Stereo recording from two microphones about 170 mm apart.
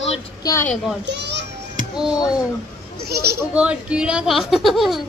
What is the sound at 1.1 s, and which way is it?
Children playing, 90° right.